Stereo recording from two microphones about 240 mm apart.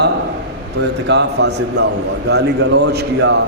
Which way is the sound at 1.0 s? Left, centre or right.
Right.